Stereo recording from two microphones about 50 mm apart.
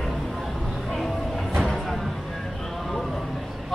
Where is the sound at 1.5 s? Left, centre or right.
Centre.